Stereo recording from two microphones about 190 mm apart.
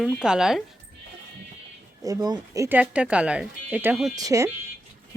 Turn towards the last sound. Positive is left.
turn(degrees=-15)  # may be behind; listen again after turning